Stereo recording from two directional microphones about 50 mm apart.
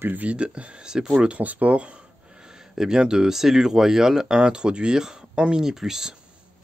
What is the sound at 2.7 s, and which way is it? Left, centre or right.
Speech, centre.